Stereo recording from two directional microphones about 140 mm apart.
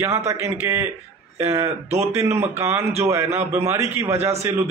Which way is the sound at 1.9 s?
50° right (ahead or behind).